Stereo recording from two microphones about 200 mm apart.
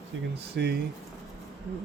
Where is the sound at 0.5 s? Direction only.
50° right (ahead or behind).